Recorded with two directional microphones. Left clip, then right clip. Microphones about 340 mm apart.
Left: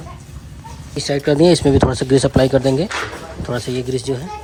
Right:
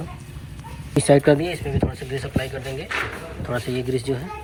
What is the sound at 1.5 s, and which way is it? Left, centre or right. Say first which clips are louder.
Speech: left 13 dB; left.